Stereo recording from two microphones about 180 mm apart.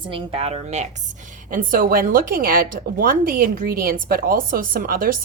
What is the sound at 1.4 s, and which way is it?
Speech, 50° right (ahead or behind).